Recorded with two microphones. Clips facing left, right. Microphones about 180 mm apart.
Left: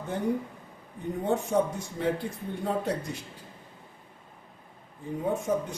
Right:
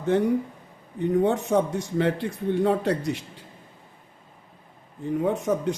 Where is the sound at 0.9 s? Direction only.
75° right (ahead or behind).